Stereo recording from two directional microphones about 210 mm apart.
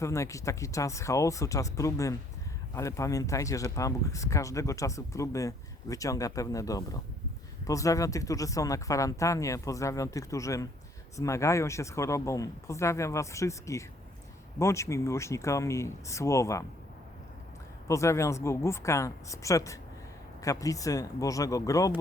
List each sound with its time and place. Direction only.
0.0 s speech: 15° left (ahead or behind)
17.8 s speech: 15° left (ahead or behind)